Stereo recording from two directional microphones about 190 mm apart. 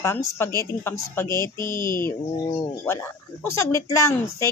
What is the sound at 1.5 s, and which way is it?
Speech, 20° right (ahead or behind).